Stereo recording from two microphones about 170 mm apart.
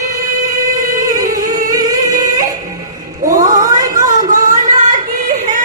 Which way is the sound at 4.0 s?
50° right (ahead or behind).